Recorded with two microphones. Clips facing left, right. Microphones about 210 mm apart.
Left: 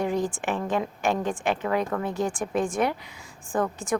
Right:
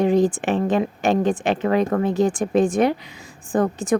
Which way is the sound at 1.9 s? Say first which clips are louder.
Right 8 dB; 40° right (ahead or behind).